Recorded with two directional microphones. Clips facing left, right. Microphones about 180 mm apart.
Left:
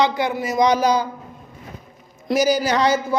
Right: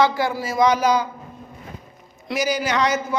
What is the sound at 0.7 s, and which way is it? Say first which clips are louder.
Speech: left 1 dB; 35° left (ahead or behind).